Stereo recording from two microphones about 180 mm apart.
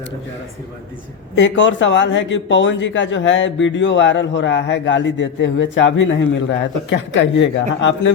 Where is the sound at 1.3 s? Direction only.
90° left.